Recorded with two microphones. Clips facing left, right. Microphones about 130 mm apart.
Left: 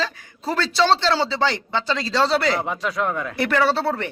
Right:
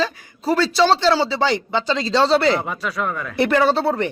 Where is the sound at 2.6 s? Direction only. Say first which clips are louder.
Left 1 dB; 20° left (ahead or behind).